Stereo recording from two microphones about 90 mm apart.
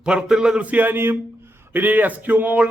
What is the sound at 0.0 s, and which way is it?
Speech, 10° right (ahead or behind).